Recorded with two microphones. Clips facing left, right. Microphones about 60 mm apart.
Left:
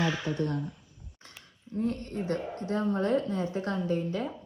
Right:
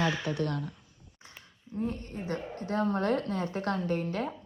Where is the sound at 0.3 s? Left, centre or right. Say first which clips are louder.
Left 1 dB; right.